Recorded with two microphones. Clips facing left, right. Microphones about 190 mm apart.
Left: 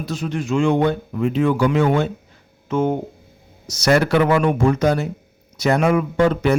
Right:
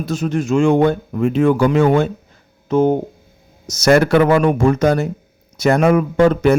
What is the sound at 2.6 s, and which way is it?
A man's voice, 35° right (ahead or behind).